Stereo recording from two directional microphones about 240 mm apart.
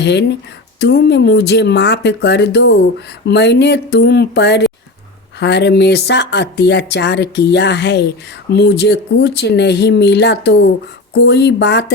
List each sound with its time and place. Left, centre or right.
0.0 s speech: left